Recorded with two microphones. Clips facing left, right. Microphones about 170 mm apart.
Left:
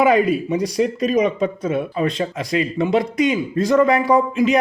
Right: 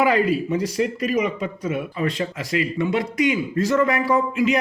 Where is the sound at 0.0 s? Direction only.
20° left (ahead or behind).